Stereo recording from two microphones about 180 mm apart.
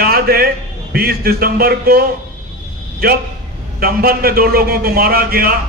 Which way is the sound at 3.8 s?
55° right (ahead or behind).